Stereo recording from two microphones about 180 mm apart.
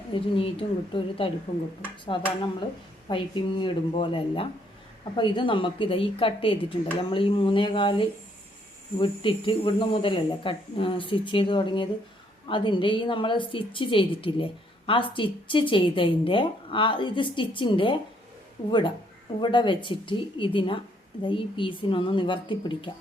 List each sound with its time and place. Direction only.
0.1 s a woman's voice: 30° left (ahead or behind)